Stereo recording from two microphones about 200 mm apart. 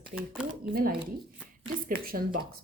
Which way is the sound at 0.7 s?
45° right (ahead or behind).